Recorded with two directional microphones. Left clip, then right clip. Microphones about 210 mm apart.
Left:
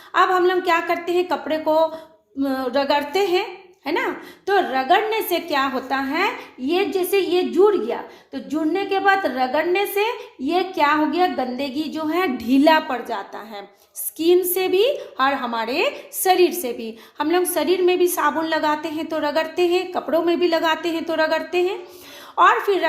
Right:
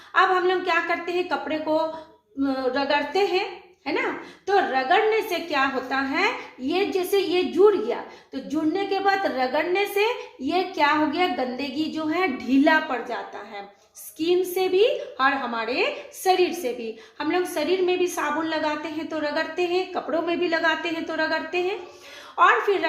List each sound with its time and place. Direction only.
0.1 s a woman's voice: 45° left (ahead or behind)